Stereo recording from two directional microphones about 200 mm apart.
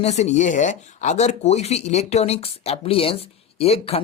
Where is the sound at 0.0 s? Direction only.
35° left (ahead or behind).